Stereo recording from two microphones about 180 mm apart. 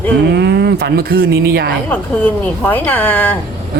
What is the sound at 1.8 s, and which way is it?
Speech, 10° left (ahead or behind).